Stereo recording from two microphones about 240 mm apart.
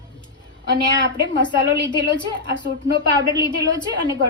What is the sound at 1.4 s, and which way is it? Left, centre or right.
A woman's voice, centre.